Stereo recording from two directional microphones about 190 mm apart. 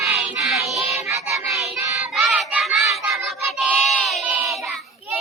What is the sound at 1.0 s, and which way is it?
Child singing, 15° right (ahead or behind).